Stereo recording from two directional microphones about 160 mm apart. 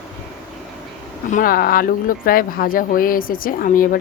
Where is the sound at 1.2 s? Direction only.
60° left (ahead or behind).